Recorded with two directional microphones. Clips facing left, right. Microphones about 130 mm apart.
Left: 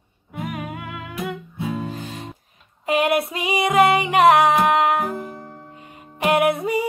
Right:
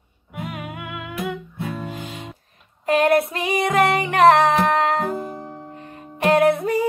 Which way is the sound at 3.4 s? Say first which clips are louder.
Left 2 dB; 15° left (ahead or behind).